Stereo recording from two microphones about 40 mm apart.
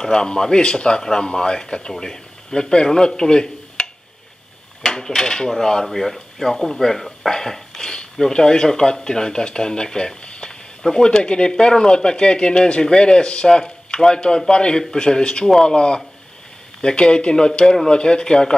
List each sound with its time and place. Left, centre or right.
0.0 s speech: centre
7.2 s a sound: centre
8.3 s speech: centre